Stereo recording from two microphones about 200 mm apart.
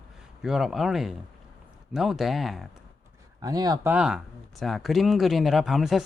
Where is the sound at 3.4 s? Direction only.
20° right (ahead or behind); by 6.0 s centre (ahead or behind).